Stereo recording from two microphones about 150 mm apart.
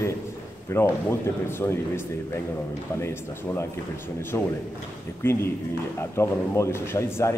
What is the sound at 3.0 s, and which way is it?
Speech, 20° left (ahead or behind).